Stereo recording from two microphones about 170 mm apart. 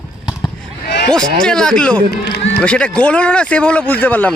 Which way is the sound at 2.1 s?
75° left (ahead or behind).